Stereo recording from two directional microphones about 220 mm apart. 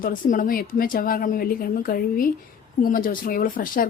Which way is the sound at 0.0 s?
40° left (ahead or behind).